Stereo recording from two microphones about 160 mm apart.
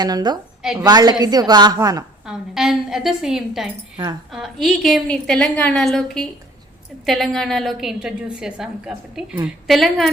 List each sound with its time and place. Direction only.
0.0 s a woman's voice: 25° right (ahead or behind)
2.2 s a woman's voice: 5° right (ahead or behind)